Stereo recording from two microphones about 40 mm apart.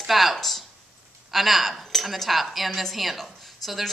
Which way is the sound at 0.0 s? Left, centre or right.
Centre.